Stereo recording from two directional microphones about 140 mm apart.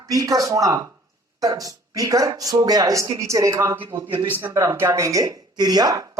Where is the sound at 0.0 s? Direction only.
25° right (ahead or behind).